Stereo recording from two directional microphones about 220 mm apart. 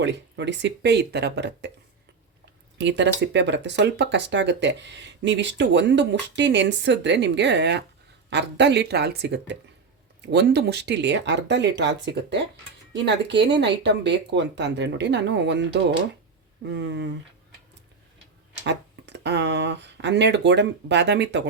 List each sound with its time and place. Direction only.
0.0 s speech: 55° right (ahead or behind)
2.7 s speech: 55° right (ahead or behind)
18.6 s speech: 50° right (ahead or behind)